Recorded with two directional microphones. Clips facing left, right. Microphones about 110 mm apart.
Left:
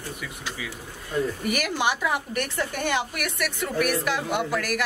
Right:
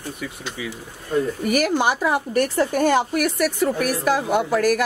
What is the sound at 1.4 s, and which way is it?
A woman's voice, 40° right (ahead or behind).